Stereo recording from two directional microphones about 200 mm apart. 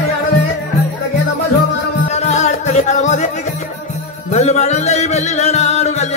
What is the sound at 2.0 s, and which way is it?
Music, 35° left (ahead or behind).